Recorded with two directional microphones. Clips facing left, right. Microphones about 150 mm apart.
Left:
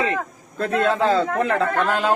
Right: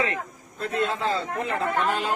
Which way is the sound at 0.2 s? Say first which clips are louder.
Left 6 dB; 90° left.